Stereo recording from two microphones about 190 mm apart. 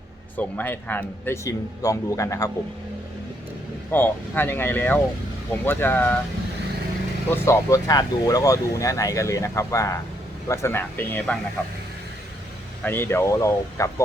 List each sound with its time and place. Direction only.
0.3 s speech: 10° left (ahead or behind)
3.9 s speech: 10° left (ahead or behind)
7.3 s speech: 15° left (ahead or behind)
12.8 s speech: 10° left (ahead or behind)